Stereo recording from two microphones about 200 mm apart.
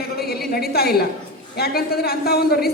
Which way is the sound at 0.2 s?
50° left (ahead or behind).